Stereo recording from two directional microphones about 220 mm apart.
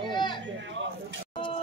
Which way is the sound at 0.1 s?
20° left (ahead or behind).